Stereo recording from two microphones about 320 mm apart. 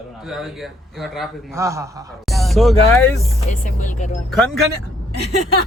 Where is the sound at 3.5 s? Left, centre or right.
Left.